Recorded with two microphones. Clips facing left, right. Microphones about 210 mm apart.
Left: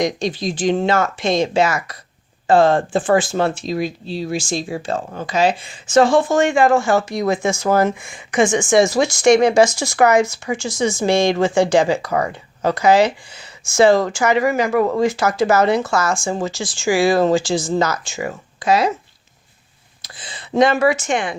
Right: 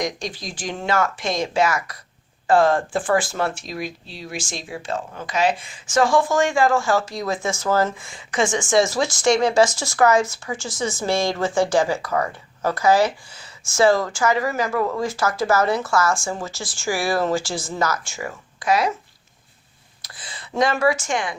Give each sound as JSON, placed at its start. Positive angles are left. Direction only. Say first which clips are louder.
{"t": 0.0, "sound": "speech", "louder": "left 7 dB", "side_deg": 25}
{"t": 20.0, "sound": "speech", "louder": "left 3 dB", "side_deg": 20}